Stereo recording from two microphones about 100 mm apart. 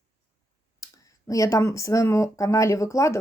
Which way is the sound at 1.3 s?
30° left (ahead or behind).